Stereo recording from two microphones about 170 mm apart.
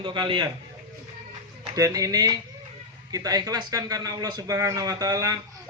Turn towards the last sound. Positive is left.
turn(degrees=-20)  # may be behind; listen again after turning